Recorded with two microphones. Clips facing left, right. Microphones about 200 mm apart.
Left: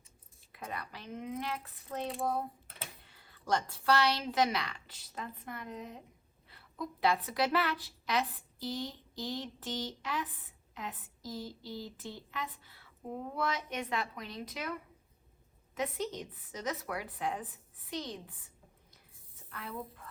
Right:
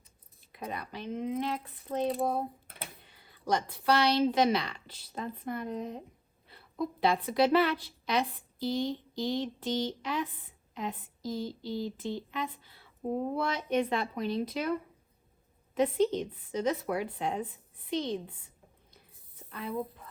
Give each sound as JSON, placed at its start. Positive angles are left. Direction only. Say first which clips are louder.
{"t": 0.5, "sound": "speech", "louder": "right 4 dB", "side_deg": -20}
{"t": 3.1, "sound": "a woman's voice", "louder": "right 2 dB", "side_deg": -15}
{"t": 19.5, "sound": "speech", "louder": "right 7 dB", "side_deg": -20}